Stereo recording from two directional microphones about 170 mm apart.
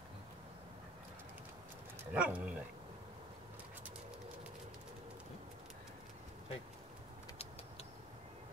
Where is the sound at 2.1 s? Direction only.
10° right (ahead or behind).